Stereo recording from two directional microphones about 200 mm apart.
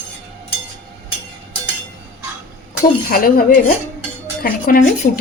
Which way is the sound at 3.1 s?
45° left (ahead or behind).